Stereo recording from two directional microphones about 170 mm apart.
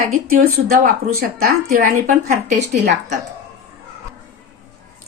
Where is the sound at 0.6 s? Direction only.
60° right (ahead or behind).